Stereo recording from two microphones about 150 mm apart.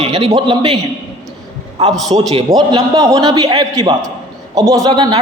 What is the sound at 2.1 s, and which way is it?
Speech, 35° right (ahead or behind).